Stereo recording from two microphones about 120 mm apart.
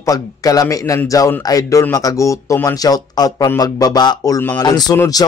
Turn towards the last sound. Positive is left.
turn(degrees=35)  # may be behind; listen again after turning